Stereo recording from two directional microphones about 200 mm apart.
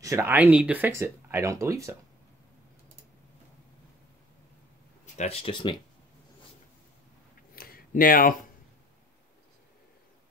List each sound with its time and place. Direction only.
0.0 s speech: 15° right (ahead or behind)
5.0 s speech: 35° left (ahead or behind)
7.5 s a sound: 45° left (ahead or behind)